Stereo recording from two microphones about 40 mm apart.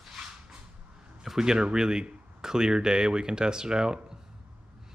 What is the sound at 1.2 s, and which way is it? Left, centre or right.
Speech, centre.